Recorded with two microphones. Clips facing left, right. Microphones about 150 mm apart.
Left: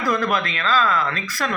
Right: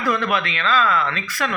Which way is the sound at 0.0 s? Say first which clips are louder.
Even; 40° left (ahead or behind).